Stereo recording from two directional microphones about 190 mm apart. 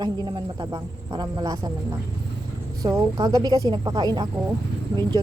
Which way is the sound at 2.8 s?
20° right (ahead or behind).